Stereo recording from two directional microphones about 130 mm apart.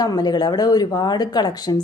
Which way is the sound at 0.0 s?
30° left (ahead or behind).